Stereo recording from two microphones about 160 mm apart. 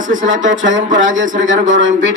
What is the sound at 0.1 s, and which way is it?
A man's voice, 55° right (ahead or behind).